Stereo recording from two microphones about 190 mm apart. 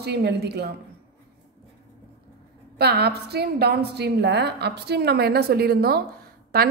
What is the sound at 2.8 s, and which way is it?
A woman's voice, 60° right (ahead or behind).